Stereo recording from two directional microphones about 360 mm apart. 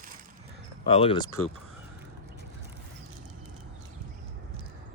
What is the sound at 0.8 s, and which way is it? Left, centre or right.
Speech, centre.